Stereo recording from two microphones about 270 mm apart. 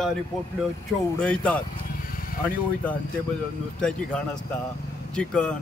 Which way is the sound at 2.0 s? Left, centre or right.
Left.